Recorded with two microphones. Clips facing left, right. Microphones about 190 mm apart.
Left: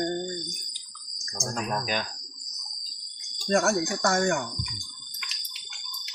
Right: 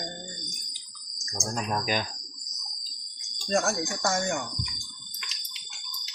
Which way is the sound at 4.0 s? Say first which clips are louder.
Left 3 dB; 60° left (ahead or behind).